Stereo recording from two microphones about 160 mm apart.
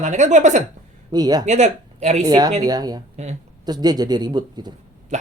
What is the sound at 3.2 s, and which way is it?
Speech, 45° right (ahead or behind).